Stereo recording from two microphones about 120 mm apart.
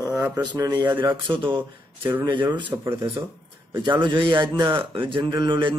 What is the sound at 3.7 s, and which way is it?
Speech, 40° right (ahead or behind).